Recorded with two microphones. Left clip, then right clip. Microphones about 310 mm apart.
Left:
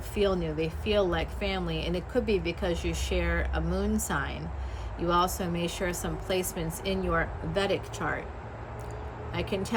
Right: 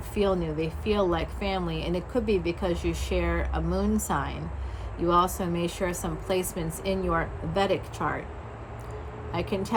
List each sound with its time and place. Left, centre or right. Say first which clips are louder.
0.1 s speech: right 1 dB; centre
9.3 s speech: right 2 dB; centre